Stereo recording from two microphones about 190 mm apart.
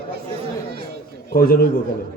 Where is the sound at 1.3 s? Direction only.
50° left (ahead or behind).